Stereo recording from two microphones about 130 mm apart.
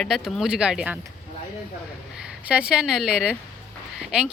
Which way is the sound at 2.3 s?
10° right (ahead or behind).